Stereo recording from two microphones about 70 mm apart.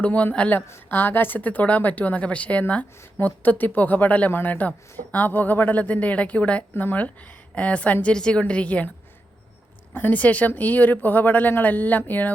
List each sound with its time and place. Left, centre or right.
0.0 s a woman's voice: left
9.9 s speech: left